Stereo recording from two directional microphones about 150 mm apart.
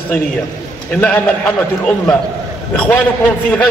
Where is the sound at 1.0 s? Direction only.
10° left (ahead or behind).